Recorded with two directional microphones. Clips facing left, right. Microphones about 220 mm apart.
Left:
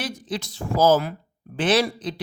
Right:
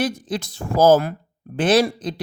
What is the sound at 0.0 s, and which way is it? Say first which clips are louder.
Speech: right 6 dB; 50° right (ahead or behind).